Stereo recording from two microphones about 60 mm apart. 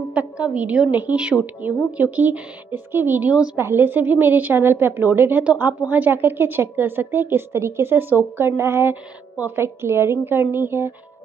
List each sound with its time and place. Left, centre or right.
0.1 s a woman's voice: right
3.5 s a woman's voice: right